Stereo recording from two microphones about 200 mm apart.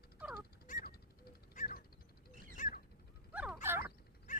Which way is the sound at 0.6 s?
45° left (ahead or behind).